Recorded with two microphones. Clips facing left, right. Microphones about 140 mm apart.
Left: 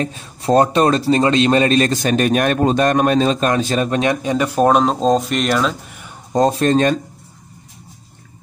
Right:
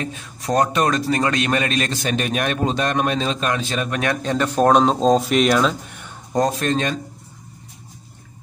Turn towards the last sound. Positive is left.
turn(degrees=40)  # may be behind; listen again after turning